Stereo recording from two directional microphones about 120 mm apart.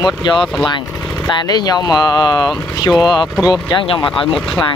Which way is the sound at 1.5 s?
35° left (ahead or behind).